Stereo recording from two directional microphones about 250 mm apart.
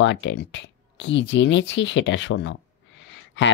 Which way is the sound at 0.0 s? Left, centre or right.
Left.